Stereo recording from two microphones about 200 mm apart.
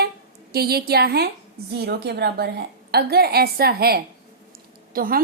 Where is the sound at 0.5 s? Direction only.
50° right (ahead or behind).